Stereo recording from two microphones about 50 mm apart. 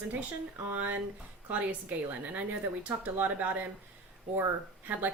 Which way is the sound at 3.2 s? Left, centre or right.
Right.